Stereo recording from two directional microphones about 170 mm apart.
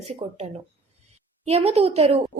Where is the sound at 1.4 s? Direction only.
40° right (ahead or behind).